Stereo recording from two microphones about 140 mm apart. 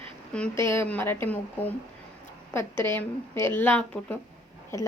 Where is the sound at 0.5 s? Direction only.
15° left (ahead or behind).